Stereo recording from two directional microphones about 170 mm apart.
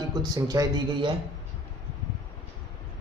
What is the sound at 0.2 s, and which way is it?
Speech, 20° right (ahead or behind).